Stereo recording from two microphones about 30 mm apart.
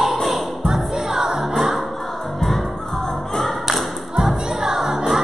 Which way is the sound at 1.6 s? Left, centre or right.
Centre.